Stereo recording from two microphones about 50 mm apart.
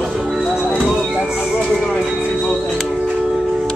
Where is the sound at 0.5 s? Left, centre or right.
Centre.